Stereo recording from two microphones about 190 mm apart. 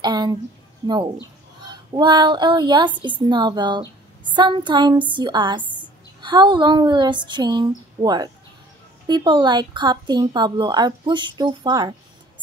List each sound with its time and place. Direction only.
0.0 s a woman's voice: 20° right (ahead or behind)
2.0 s a woman's voice: 20° right (ahead or behind)